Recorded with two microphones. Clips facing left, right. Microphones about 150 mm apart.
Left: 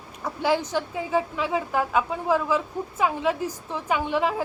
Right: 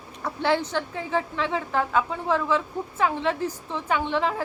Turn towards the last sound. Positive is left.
turn(degrees=10)  # may be behind; listen again after turning